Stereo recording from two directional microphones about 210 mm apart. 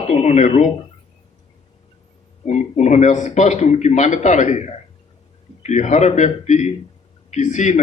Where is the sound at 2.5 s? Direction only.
35° left (ahead or behind).